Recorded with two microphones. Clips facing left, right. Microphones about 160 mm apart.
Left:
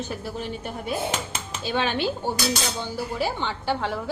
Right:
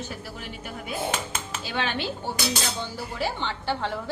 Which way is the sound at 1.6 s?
20° left (ahead or behind).